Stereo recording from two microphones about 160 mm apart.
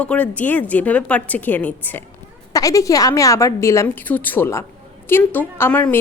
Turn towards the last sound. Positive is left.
turn(degrees=10)  # may be behind; listen again after turning